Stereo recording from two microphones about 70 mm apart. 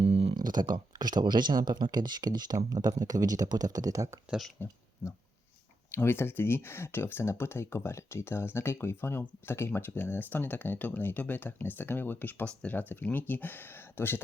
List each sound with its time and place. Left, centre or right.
0.4 s speech: right
2.6 s speech: right
4.6 s speech: left